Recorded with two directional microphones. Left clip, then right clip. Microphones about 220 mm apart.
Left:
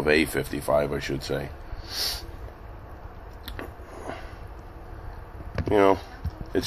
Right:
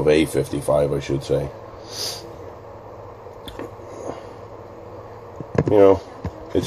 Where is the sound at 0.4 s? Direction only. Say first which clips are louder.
Right 5 dB; 40° left (ahead or behind).